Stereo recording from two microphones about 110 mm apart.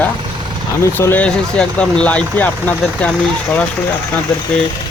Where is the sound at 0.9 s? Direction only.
15° left (ahead or behind).